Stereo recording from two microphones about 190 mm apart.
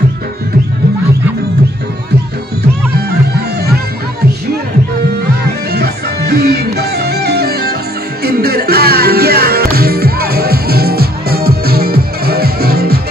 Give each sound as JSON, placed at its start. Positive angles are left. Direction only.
{"t": 5.7, "sound": "music", "side_deg": -55}